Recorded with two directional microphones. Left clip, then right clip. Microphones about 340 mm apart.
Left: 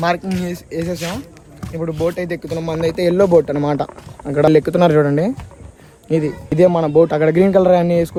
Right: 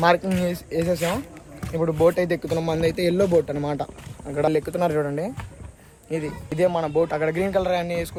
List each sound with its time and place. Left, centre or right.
0.0 s speech: centre
1.6 s speech: centre
2.9 s speech: centre
3.2 s speech: left
6.6 s speech: centre